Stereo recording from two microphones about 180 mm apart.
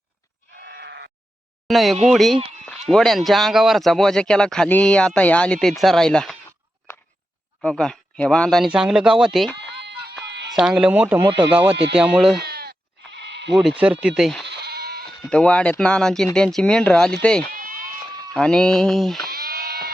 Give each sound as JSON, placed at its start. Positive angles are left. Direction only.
{"t": 0.5, "sound": "bleat", "side_deg": -70}
{"t": 1.6, "sound": "speech", "side_deg": 0}
{"t": 7.6, "sound": "speech", "side_deg": 5}
{"t": 10.2, "sound": "a sound", "side_deg": -70}
{"t": 10.5, "sound": "speech", "side_deg": -5}
{"t": 11.2, "sound": "speech", "side_deg": -30}
{"t": 11.9, "sound": "speech", "side_deg": -5}
{"t": 12.4, "sound": "bleat", "side_deg": -60}
{"t": 13.5, "sound": "speech", "side_deg": 0}
{"t": 14.4, "sound": "goat", "side_deg": -65}
{"t": 15.2, "sound": "speech", "side_deg": 5}
{"t": 17.5, "sound": "sheep", "side_deg": -50}
{"t": 18.3, "sound": "speech", "side_deg": 5}
{"t": 19.3, "sound": "sheep", "side_deg": -55}